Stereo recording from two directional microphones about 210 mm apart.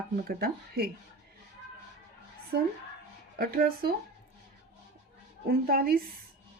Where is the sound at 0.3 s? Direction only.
45° right (ahead or behind).